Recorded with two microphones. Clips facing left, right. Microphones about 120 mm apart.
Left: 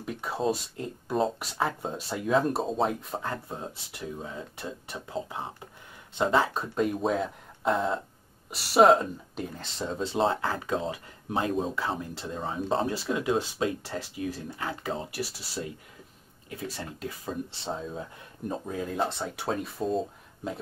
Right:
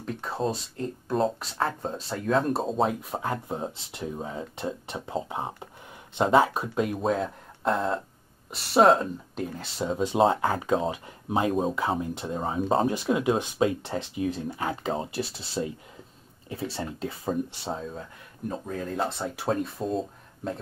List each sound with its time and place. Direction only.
0.0 s speech: 5° left (ahead or behind); by 6.6 s 20° right (ahead or behind)
6.7 s speech: centre (ahead or behind); by 17.3 s 25° right (ahead or behind)
17.6 s speech: centre (ahead or behind)